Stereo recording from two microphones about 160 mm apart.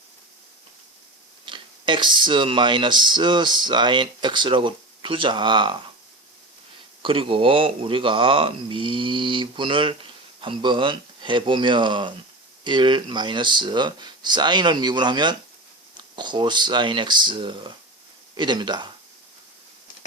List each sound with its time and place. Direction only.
1.5 s speech: 30° right (ahead or behind)
7.0 s speech: 35° right (ahead or behind)